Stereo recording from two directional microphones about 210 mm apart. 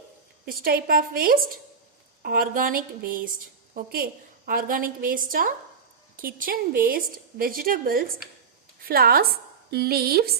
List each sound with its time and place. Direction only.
0.4 s a woman's voice: 45° right (ahead or behind)